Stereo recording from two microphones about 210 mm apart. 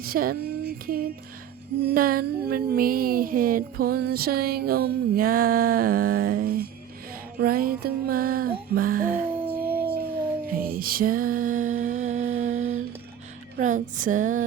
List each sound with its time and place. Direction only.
0.0 s music: 45° right (ahead or behind)
1.9 s a sound: 45° right (ahead or behind)
9.5 s howl: 10° right (ahead or behind)
10.4 s music: 45° right (ahead or behind)
11.8 s humming: 35° right (ahead or behind)
13.6 s a sound: 35° right (ahead or behind)